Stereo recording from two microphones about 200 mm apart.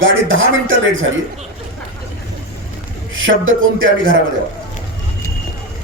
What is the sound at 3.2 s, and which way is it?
Speech, 80° right.